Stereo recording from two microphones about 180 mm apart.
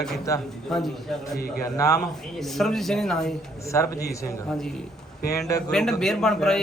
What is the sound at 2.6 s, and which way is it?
Speech, centre (ahead or behind).